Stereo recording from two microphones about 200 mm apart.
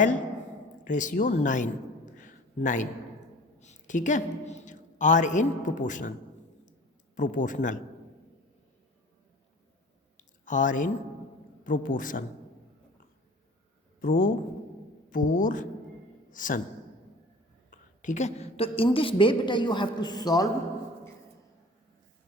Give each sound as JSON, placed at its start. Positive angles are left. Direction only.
{"t": 0.9, "sound": "a woman's voice", "side_deg": 40}
{"t": 2.1, "sound": "a sound", "side_deg": 40}
{"t": 3.6, "sound": "a woman's voice", "side_deg": 35}
{"t": 7.2, "sound": "a woman's voice", "side_deg": 40}
{"t": 10.2, "sound": "a sound", "side_deg": 40}
{"t": 11.6, "sound": "a man's voice", "side_deg": 45}
{"t": 14.0, "sound": "a man's voice", "side_deg": 45}
{"t": 17.7, "sound": "a woman's voice", "side_deg": 40}